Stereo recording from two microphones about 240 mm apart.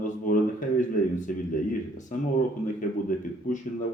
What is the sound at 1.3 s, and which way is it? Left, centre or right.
Speech, left.